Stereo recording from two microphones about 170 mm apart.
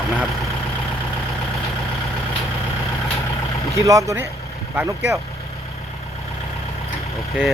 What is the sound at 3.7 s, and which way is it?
Speech, 20° right (ahead or behind).